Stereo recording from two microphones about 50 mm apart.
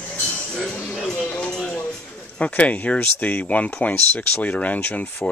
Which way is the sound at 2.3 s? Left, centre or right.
Left.